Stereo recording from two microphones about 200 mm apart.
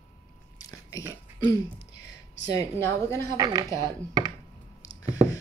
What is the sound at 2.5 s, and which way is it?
Speech, 15° left (ahead or behind).